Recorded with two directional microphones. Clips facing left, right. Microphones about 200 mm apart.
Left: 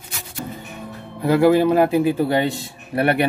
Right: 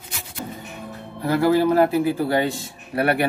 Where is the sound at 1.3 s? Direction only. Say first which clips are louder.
Left 3 dB; 15° left (ahead or behind).